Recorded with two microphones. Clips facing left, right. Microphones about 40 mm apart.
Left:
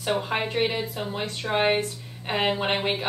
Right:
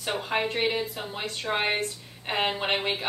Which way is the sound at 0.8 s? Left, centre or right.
Centre.